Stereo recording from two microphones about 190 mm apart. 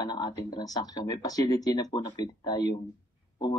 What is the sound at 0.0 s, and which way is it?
Speech, 20° left (ahead or behind).